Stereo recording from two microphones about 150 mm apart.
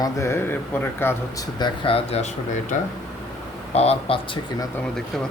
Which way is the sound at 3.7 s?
45° left (ahead or behind).